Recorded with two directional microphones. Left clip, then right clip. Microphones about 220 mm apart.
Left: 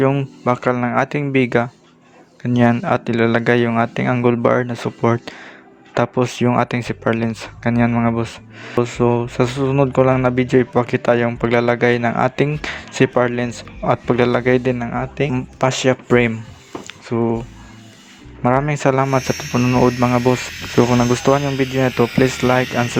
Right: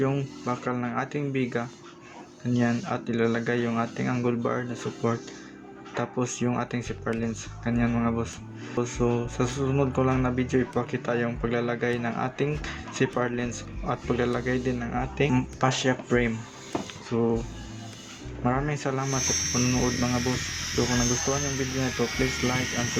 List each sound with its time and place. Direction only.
0.0 s speech: 35° left (ahead or behind)
16.8 s a sound: 35° left (ahead or behind)
18.4 s speech: 40° left (ahead or behind)
20.7 s speech: 50° left (ahead or behind)